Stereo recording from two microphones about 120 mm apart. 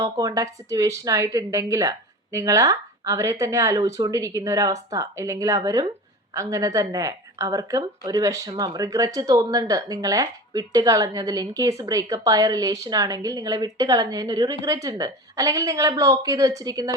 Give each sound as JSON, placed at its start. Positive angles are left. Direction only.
{"t": 0.0, "sound": "a woman's voice", "side_deg": -30}